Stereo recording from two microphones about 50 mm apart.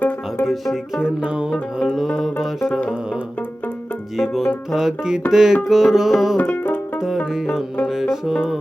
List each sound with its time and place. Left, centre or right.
0.9 s music: centre
1.8 s music: centre
4.2 s music: centre
7.9 s music: centre